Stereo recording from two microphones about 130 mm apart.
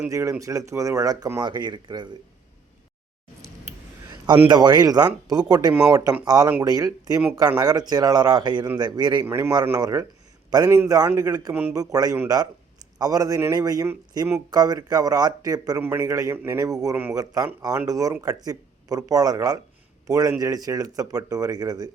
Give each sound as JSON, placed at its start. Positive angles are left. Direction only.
{"t": 0.1, "sound": "speech", "side_deg": -25}
{"t": 4.4, "sound": "speech", "side_deg": -35}
{"t": 5.7, "sound": "speech", "side_deg": -10}
{"t": 6.2, "sound": "speech", "side_deg": -30}
{"t": 9.2, "sound": "speech", "side_deg": -20}
{"t": 16.9, "sound": "speech", "side_deg": -15}
{"t": 17.2, "sound": "speech", "side_deg": -25}